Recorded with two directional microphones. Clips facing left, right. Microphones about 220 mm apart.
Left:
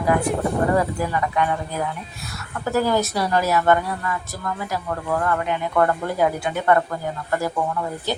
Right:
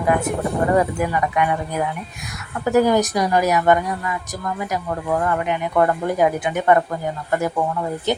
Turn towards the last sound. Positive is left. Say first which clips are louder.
# right 2 dB
turn(degrees=-20)  # may be behind; listen again after turning